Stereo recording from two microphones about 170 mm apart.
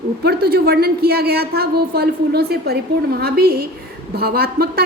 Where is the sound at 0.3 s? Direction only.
65° right (ahead or behind).